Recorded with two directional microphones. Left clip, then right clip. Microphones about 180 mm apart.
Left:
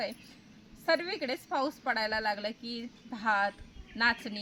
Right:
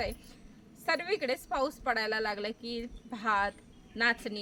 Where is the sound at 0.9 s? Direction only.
35° right (ahead or behind).